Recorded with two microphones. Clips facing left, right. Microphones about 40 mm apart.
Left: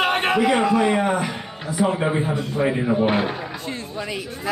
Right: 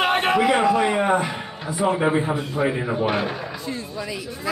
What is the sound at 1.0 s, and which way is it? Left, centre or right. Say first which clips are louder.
Speech: right 2 dB; centre.